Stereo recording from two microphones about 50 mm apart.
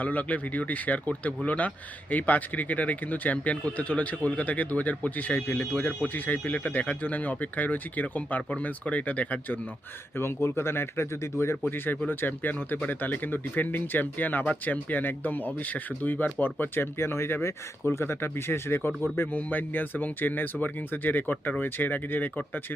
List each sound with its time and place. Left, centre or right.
0.0 s speech: left
10.2 s speech: left
11.6 s speech: left
19.3 s speech: left